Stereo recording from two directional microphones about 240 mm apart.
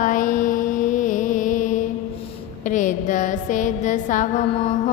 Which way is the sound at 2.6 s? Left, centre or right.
Left.